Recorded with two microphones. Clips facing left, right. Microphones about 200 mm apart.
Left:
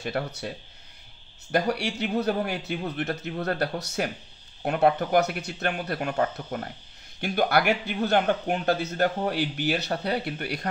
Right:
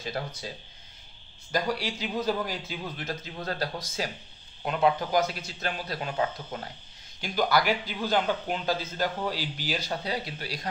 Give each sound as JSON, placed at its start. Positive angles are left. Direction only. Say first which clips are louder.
{"t": 0.0, "sound": "a man's voice", "louder": "left 4 dB", "side_deg": 65}
{"t": 1.5, "sound": "a man's voice", "louder": "left 4 dB", "side_deg": 65}